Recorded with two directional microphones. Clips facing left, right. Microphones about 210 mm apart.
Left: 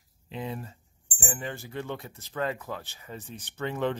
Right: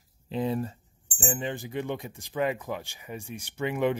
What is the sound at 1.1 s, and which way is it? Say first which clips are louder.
Speech: right 4 dB; 20° right (ahead or behind).